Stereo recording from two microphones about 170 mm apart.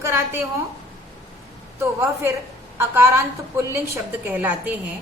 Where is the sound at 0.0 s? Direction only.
15° right (ahead or behind).